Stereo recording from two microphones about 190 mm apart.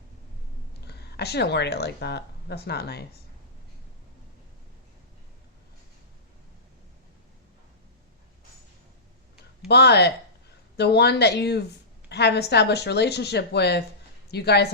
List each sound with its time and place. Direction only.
0.9 s speech: 60° left (ahead or behind)
9.6 s speech: 60° left (ahead or behind)